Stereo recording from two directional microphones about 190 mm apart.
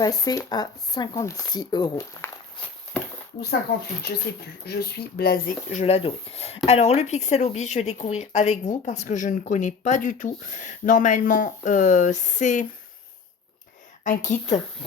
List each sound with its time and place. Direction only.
0.0 s speech: 20° left (ahead or behind)
4.3 s speech: 60° left (ahead or behind)
5.8 s speech: 30° left (ahead or behind)
14.0 s speech: 40° left (ahead or behind)